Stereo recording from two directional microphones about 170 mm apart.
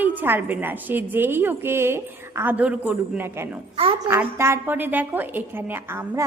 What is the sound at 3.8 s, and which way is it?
Speech, 35° right (ahead or behind).